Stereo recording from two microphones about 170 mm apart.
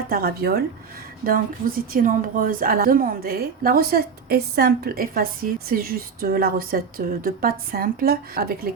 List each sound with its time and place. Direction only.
0.1 s a woman's voice: 65° right (ahead or behind)